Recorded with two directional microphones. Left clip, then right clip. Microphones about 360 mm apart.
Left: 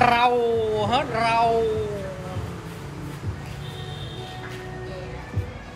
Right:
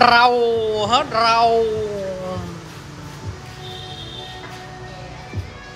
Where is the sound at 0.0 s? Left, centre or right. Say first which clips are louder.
Right 6 dB; centre.